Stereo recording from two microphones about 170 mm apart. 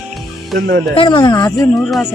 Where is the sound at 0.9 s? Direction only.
30° left (ahead or behind).